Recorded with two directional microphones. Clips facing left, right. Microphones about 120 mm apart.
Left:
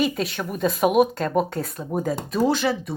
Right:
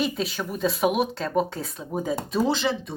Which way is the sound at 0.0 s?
Centre (ahead or behind).